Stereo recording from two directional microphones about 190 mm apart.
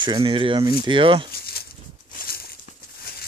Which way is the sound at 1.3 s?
55° left (ahead or behind).